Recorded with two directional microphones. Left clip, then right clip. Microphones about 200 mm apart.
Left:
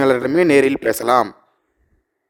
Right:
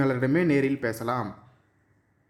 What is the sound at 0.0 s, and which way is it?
Speech, 55° left (ahead or behind).